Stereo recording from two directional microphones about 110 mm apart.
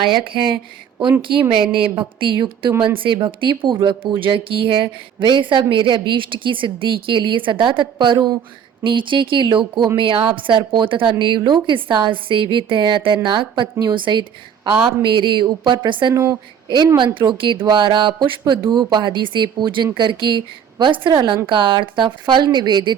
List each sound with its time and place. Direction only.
0.0 s a woman's voice: 45° right (ahead or behind)
16.1 s a woman's voice: 25° right (ahead or behind)
16.6 s a woman's voice: 45° right (ahead or behind)